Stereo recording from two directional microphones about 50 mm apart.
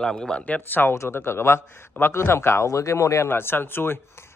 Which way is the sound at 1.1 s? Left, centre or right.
Left.